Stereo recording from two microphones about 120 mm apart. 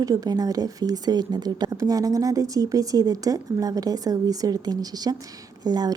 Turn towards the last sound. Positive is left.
turn(degrees=-35)  # may be behind; listen again after turning